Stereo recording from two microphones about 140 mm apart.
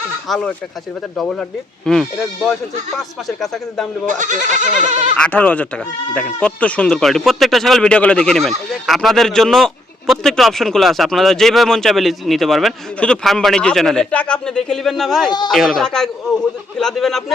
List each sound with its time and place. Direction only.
0.3 s speech: 5° left (ahead or behind)
4.0 s speech: 65° right (ahead or behind)
5.1 s speech: 10° left (ahead or behind)